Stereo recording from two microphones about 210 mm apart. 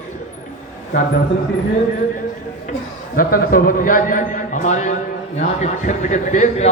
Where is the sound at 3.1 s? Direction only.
45° left (ahead or behind).